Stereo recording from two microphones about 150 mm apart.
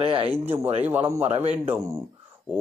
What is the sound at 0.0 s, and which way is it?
Speech, 40° right (ahead or behind).